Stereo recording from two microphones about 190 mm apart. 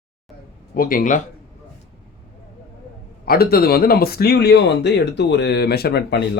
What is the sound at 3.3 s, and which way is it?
Speech, 55° left (ahead or behind).